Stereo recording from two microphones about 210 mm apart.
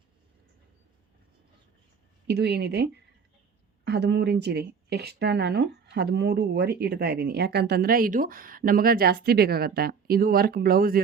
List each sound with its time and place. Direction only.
2.2 s speech: 50° right (ahead or behind)